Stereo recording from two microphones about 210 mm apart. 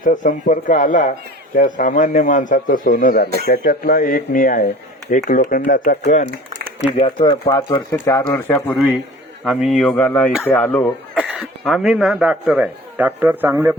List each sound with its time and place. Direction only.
0.0 s a man's voice: 35° left (ahead or behind)
7.0 s speech: 20° left (ahead or behind); by 13.7 s 10° right (ahead or behind)